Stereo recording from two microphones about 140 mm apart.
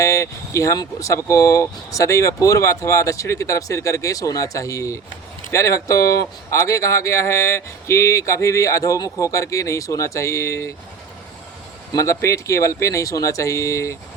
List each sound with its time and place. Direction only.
0.0 s speech: 20° left (ahead or behind)
11.9 s speech: 20° left (ahead or behind)